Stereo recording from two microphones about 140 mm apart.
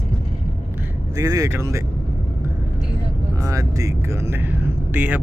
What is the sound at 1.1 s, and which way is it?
Speech, 25° right (ahead or behind).